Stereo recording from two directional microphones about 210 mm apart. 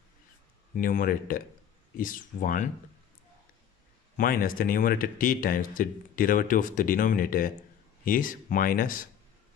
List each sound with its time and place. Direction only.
0.7 s speech: 40° left (ahead or behind)
4.2 s speech: 40° left (ahead or behind)